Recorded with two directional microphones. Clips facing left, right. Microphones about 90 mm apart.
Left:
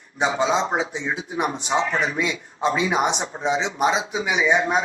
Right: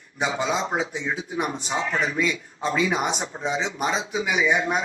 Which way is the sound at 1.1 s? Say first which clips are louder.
Left 2 dB; 40° left (ahead or behind).